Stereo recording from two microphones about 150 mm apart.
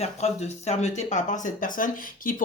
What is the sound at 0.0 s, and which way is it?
Speech, 45° left (ahead or behind).